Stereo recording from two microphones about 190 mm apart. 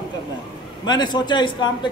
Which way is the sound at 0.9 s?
20° left (ahead or behind).